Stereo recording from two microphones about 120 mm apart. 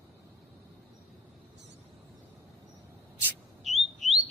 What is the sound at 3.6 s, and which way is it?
Chirp, centre (ahead or behind).